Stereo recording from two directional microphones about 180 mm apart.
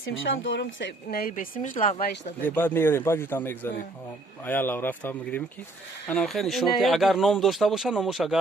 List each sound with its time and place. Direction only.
0.0 s speech: 90° left; by 2.3 s 50° left (ahead or behind)
2.4 s a man's voice: 10° left (ahead or behind)